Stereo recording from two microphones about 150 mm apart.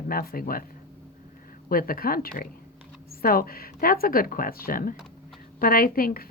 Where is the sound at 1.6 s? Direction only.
75° left (ahead or behind).